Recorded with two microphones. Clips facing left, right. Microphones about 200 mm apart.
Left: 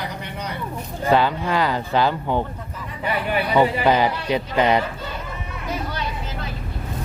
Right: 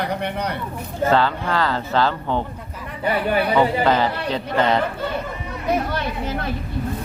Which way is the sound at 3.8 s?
15° left (ahead or behind).